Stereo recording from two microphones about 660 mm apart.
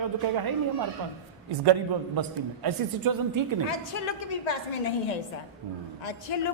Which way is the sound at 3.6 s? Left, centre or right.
Left.